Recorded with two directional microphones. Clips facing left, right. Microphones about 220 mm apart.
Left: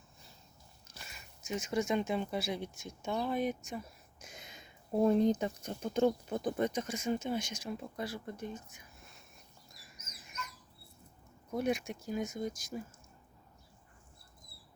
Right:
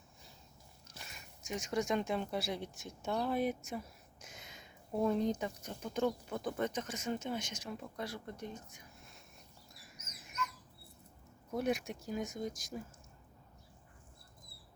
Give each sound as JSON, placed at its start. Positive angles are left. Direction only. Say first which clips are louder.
{"t": 0.9, "sound": "speech", "louder": "even", "side_deg": 0}
{"t": 4.2, "sound": "a sound", "louder": "left 2 dB", "side_deg": 15}
{"t": 5.0, "sound": "speech", "louder": "left 5 dB", "side_deg": 30}
{"t": 11.5, "sound": "speech", "louder": "left 2 dB", "side_deg": 0}